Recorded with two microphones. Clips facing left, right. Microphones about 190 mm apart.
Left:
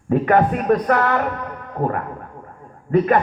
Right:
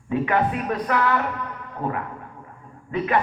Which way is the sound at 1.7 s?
45° left (ahead or behind).